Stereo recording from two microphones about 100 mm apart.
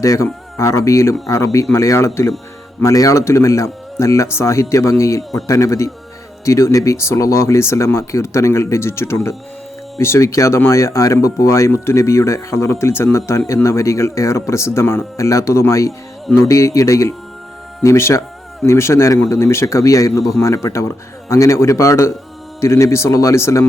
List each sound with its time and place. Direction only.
0.0 s speech: 35° left (ahead or behind)